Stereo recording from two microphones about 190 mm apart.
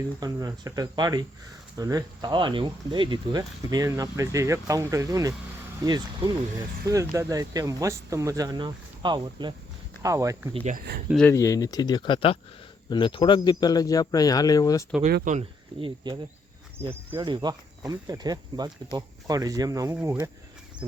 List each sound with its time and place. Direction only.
0.2 s speech: 20° right (ahead or behind)
10.5 s speech: 30° right (ahead or behind)
10.8 s speech: 55° right (ahead or behind)
11.3 s speech: 15° left (ahead or behind)
15.1 s speech: 40° right (ahead or behind)
15.7 s speech: 25° right (ahead or behind)
17.2 s speech: 25° right (ahead or behind)